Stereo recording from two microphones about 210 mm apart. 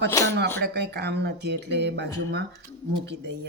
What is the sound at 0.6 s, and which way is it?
Speech, 55° right (ahead or behind).